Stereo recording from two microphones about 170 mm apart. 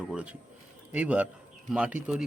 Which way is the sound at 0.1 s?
5° right (ahead or behind).